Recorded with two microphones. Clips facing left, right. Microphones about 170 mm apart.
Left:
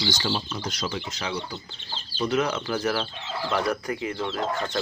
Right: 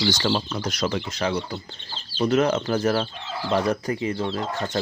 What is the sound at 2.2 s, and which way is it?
Speech, 45° right (ahead or behind).